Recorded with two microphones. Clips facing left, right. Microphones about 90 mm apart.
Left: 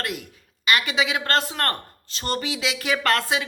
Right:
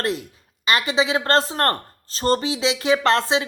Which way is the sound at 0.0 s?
30° right (ahead or behind).